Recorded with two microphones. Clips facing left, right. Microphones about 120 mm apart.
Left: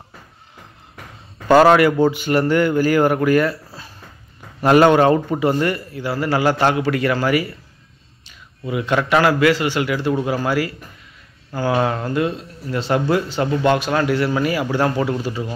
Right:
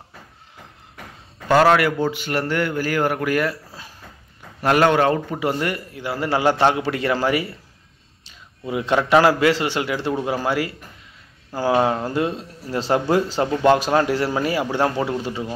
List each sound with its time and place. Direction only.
1.8 s speech: 5° left (ahead or behind)
4.6 s a man's voice: 5° left (ahead or behind); by 12.0 s 20° right (ahead or behind)
12.1 s speech: 30° right (ahead or behind)